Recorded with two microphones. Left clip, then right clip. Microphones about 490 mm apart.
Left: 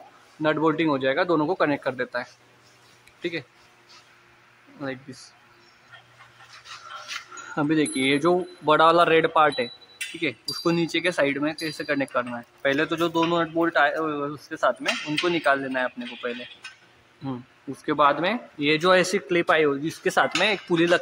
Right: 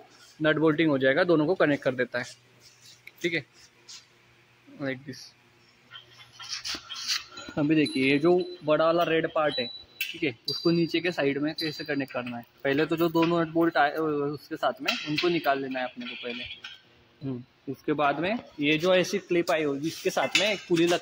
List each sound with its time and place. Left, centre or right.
0.4 s speech: right
4.7 s speech: right
7.5 s speech: right
7.8 s speech: right
8.2 s speech: right
17.8 s speech: right